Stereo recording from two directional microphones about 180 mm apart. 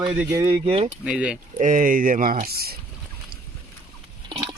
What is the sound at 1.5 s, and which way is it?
Speech, 45° right (ahead or behind).